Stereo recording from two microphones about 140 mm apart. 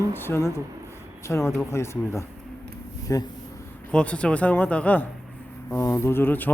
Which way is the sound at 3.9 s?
10° left (ahead or behind).